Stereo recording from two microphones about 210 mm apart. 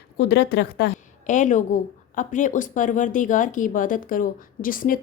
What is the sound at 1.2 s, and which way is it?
Speech, 35° left (ahead or behind).